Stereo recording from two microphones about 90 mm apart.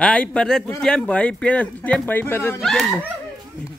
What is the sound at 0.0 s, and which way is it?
Speech, 10° left (ahead or behind).